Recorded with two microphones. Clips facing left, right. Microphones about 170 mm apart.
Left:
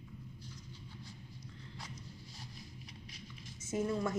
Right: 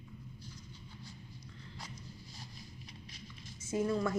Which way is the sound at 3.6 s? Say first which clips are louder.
Right 2 dB; 20° left (ahead or behind).